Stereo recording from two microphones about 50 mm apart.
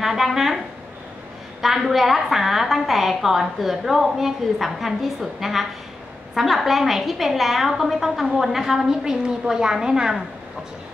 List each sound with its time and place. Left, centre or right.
0.0 s speech: centre
1.6 s a woman's voice: centre